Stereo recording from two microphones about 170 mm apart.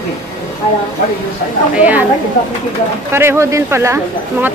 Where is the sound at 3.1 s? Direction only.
15° right (ahead or behind).